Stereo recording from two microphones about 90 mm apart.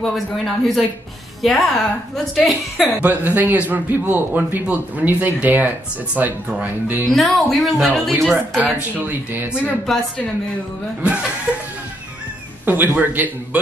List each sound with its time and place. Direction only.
0.0 s a woman's voice: 5° left (ahead or behind)
3.0 s a man's voice: 20° right (ahead or behind)
7.1 s a woman's voice: centre (ahead or behind)
8.5 s speech: 15° right (ahead or behind)
9.5 s a woman's voice: 25° left (ahead or behind)
12.6 s a man's voice: 20° right (ahead or behind)